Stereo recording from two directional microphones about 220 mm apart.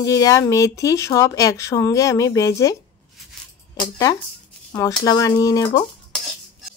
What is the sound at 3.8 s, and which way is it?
Speech, 15° left (ahead or behind).